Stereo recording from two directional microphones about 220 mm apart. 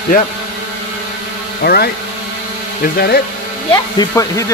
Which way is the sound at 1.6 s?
45° left (ahead or behind).